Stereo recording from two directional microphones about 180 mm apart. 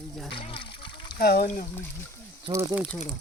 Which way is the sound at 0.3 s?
30° left (ahead or behind).